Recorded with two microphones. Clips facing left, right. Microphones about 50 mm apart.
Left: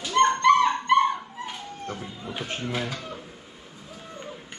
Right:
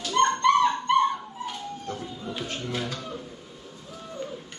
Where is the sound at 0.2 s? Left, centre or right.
Left.